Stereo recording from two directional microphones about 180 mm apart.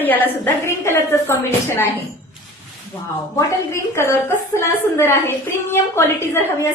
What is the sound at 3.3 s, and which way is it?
A woman's voice, 15° left (ahead or behind).